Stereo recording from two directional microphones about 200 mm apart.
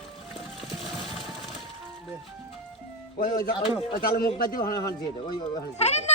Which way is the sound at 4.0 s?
50° left (ahead or behind).